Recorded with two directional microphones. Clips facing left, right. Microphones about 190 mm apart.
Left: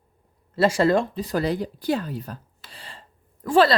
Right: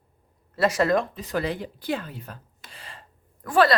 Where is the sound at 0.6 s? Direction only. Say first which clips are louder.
Left 3 dB; 30° left (ahead or behind).